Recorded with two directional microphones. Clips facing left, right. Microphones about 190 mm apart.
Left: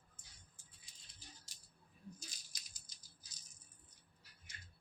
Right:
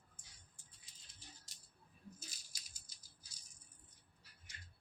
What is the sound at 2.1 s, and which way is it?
Rattle, 10° right (ahead or behind).